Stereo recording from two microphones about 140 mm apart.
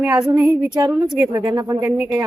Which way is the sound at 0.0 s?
10° right (ahead or behind).